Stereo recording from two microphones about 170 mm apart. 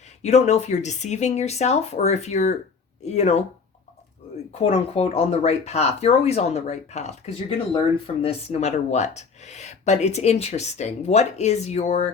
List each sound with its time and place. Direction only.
0.2 s speech: 40° left (ahead or behind)
4.5 s speech: 35° left (ahead or behind)